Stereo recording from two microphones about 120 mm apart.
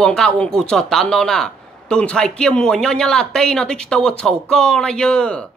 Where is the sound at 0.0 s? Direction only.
5° left (ahead or behind).